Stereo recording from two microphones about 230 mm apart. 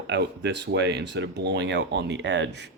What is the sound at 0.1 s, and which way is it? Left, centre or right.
Speech, right.